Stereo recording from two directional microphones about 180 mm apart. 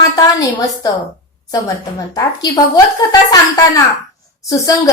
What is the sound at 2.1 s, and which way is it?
Speech, 20° left (ahead or behind).